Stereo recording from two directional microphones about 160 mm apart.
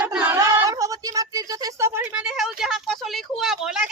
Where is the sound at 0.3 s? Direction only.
20° right (ahead or behind).